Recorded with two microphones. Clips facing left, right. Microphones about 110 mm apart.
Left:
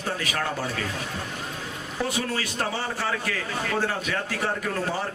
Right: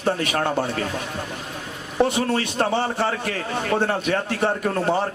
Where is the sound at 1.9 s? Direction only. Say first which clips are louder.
Right 8 dB; 30° right (ahead or behind).